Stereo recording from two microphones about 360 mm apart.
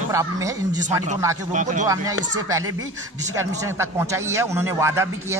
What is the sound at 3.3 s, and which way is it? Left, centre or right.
Speech, centre.